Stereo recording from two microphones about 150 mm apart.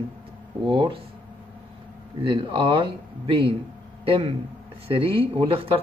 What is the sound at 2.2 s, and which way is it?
Speech, 35° right (ahead or behind).